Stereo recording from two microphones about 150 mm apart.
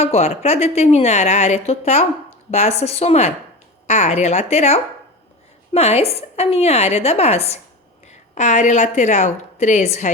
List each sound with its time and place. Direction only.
0.0 s a woman's voice: 45° left (ahead or behind)